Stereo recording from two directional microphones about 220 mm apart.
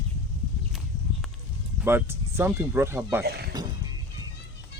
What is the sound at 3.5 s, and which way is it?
Music, 20° right (ahead or behind).